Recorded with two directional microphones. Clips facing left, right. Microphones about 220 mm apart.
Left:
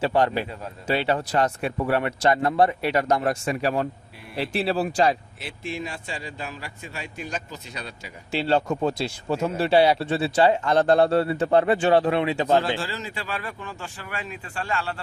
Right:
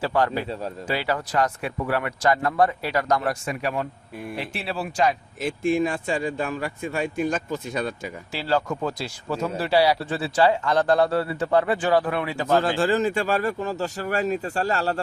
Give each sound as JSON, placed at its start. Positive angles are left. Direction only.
{"t": 0.0, "sound": "speech", "side_deg": 25}
{"t": 5.4, "sound": "speech", "side_deg": -50}
{"t": 8.3, "sound": "speech", "side_deg": 25}
{"t": 12.8, "sound": "speech", "side_deg": -50}